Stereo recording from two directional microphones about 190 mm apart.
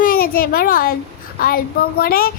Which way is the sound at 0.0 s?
50° left (ahead or behind).